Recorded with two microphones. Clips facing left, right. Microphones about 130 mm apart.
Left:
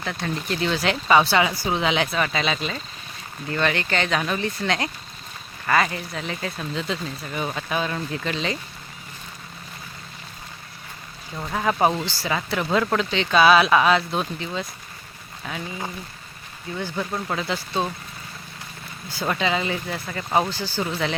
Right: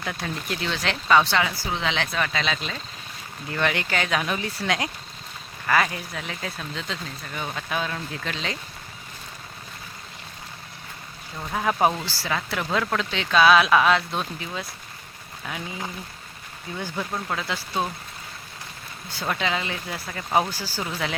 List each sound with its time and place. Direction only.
0.0 s speech: 5° right (ahead or behind)
3.5 s speech: 10° right (ahead or behind)
11.5 s speech: centre (ahead or behind)
17.0 s speech: centre (ahead or behind)
19.2 s speech: centre (ahead or behind)